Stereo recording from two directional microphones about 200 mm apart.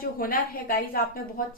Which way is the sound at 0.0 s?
45° left (ahead or behind).